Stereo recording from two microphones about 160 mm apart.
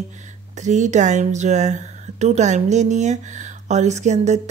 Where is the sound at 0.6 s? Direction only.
50° right (ahead or behind).